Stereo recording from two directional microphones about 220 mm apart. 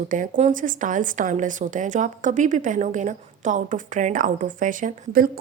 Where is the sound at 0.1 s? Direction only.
35° right (ahead or behind).